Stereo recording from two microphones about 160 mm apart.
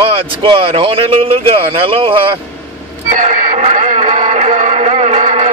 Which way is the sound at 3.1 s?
55° right (ahead or behind).